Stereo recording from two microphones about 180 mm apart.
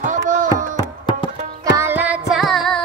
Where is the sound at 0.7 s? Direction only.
25° left (ahead or behind).